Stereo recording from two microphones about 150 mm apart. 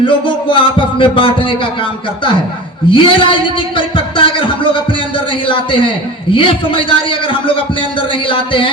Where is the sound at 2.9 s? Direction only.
35° left (ahead or behind).